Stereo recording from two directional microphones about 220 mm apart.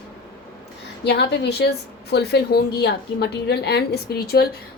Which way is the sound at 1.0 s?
50° left (ahead or behind).